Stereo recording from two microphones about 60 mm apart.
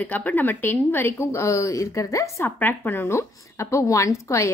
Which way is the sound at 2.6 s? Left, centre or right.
Left.